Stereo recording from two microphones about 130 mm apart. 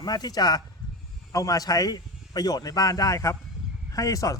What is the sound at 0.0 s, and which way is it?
Speech, 30° left (ahead or behind).